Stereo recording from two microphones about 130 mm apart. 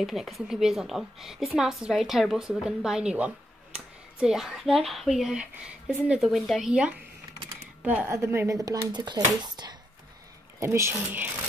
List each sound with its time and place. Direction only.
0.0 s a woman's voice: centre (ahead or behind); by 9.8 s 35° right (ahead or behind)
10.6 s speech: 20° right (ahead or behind)